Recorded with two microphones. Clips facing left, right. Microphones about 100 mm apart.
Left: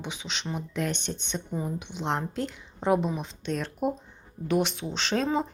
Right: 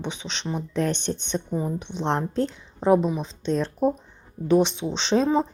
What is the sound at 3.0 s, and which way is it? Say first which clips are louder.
Speech: right 4 dB; 15° right (ahead or behind).